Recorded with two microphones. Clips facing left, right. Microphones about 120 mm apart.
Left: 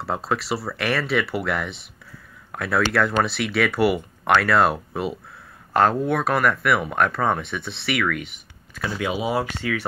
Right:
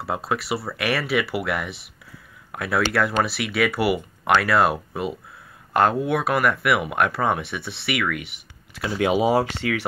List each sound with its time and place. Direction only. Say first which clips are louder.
0.0 s speech: left 1 dB; 5° right (ahead or behind)
9.2 s speech: right 4 dB; 35° right (ahead or behind)